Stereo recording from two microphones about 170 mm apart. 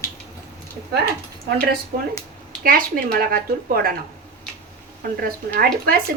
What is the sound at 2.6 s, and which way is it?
A woman's voice, 60° right (ahead or behind).